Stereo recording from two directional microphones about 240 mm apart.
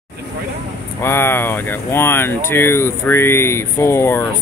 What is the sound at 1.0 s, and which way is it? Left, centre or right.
Speech, centre.